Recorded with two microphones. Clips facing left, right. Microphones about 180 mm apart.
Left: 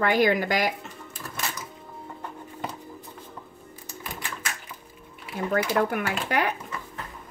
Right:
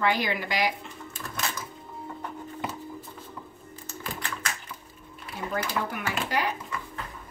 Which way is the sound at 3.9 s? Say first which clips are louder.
Right 2 dB; 15° left (ahead or behind).